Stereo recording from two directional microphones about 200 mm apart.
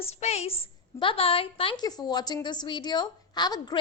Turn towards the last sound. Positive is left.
turn(degrees=20)  # may be behind; listen again after turning